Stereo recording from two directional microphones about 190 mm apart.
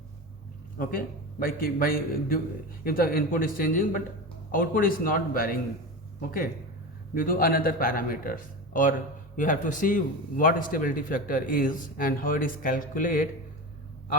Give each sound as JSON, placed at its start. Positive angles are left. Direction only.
{"t": 0.8, "sound": "speech", "side_deg": 50}
{"t": 7.1, "sound": "speech", "side_deg": 50}